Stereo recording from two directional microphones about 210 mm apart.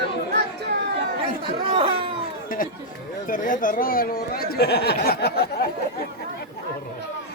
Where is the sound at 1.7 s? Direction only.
25° right (ahead or behind).